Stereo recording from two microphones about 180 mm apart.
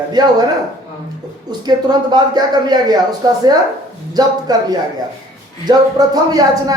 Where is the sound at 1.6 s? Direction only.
25° right (ahead or behind).